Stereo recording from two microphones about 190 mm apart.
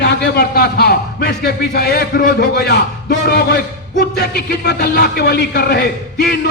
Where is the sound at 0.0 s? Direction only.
60° left (ahead or behind).